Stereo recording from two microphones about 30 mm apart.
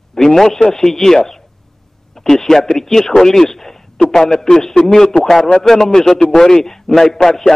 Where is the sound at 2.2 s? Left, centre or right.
Centre.